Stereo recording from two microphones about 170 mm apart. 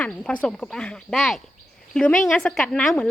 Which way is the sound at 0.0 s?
10° left (ahead or behind).